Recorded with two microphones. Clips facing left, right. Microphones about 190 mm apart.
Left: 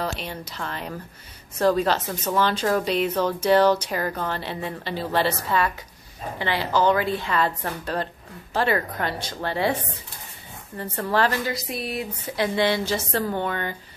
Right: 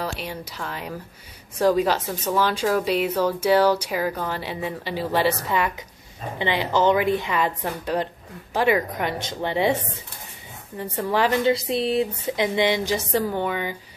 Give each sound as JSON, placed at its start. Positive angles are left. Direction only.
{"t": 0.0, "sound": "a woman's voice", "side_deg": -10}
{"t": 10.8, "sound": "a woman's voice", "side_deg": -15}